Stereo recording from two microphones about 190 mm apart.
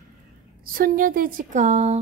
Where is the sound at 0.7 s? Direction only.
50° right (ahead or behind).